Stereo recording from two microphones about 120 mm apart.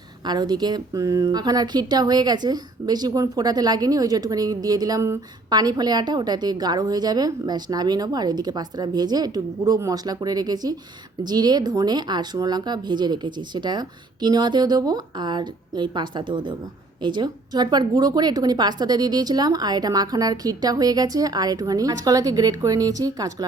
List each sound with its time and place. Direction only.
0.3 s speech: 35° right (ahead or behind)